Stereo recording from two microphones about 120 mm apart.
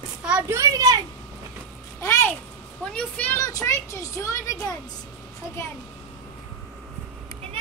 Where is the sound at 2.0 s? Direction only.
20° left (ahead or behind).